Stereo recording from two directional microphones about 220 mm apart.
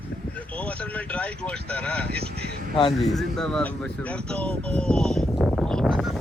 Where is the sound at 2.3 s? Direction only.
45° right (ahead or behind).